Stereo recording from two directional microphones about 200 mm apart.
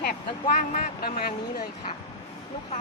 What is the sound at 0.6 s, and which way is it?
Speech, 45° left (ahead or behind).